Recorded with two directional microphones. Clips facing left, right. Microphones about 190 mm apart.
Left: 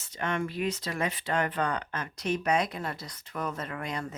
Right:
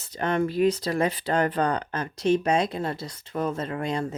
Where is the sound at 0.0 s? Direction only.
35° right (ahead or behind).